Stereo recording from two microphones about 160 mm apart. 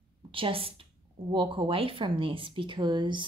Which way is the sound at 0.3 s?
35° right (ahead or behind).